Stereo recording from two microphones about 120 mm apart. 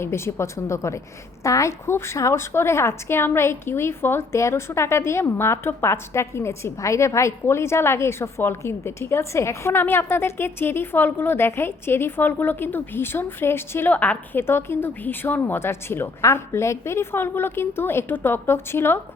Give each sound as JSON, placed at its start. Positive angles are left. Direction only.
{"t": 0.0, "sound": "a woman's voice", "side_deg": 20}